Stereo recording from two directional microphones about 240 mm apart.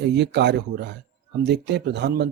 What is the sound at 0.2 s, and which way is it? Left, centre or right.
Speech, right.